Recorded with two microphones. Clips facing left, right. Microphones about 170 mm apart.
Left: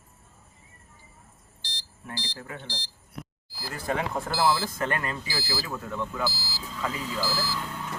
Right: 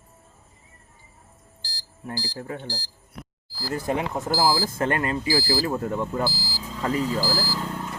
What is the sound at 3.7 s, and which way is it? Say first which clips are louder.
Speech: right 3 dB; 20° right (ahead or behind).